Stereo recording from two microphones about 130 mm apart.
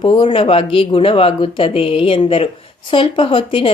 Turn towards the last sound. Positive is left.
turn(degrees=45)  # may be behind; listen again after turning